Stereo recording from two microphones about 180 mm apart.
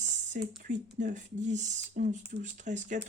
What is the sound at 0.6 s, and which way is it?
Speech, 45° right (ahead or behind).